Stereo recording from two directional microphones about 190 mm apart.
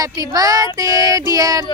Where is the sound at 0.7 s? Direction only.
20° right (ahead or behind).